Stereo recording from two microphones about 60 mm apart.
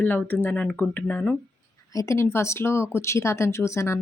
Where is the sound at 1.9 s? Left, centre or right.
Left.